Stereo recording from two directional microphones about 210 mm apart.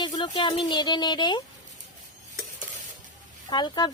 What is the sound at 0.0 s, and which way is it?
Speech, 20° left (ahead or behind).